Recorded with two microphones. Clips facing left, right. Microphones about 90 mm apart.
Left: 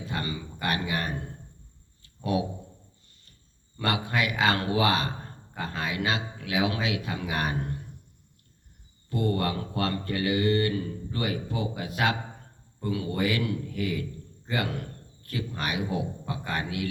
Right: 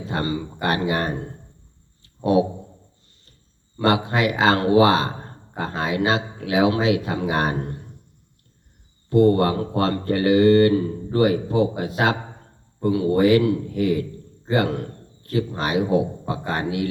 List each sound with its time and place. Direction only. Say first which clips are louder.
0.0 s speech: right 8 dB; 30° right (ahead or behind)
3.8 s speech: right 8 dB; 30° right (ahead or behind)
9.0 s a man's voice: right 11 dB; 30° right (ahead or behind)